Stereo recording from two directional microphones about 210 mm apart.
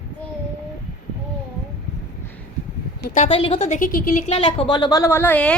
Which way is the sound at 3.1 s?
30° left (ahead or behind).